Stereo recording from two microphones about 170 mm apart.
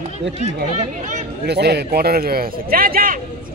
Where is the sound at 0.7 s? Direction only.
50° right (ahead or behind).